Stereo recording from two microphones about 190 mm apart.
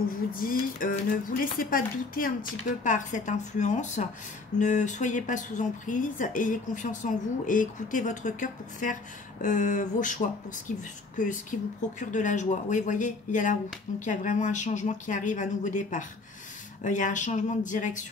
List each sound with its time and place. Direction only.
0.3 s speech: 45° left (ahead or behind)